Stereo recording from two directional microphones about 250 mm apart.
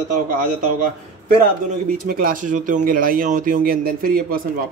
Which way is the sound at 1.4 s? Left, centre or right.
Right.